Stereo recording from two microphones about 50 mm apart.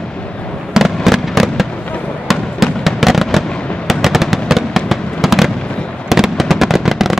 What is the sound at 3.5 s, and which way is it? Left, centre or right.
Fireworks, left.